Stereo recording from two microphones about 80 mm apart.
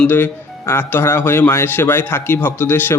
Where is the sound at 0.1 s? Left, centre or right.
Left.